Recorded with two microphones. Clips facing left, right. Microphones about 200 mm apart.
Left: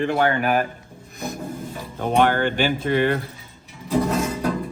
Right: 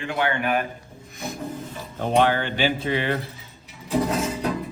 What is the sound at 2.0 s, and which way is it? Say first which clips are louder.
Speech: left 1 dB; 50° left (ahead or behind).